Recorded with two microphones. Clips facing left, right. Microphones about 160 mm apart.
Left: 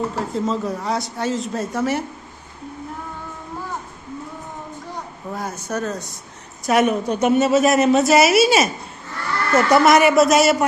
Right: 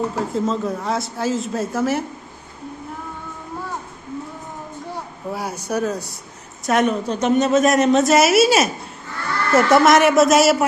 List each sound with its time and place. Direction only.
0.2 s speech: centre (ahead or behind)
5.3 s speech: 10° right (ahead or behind)
6.7 s speech: 5° left (ahead or behind)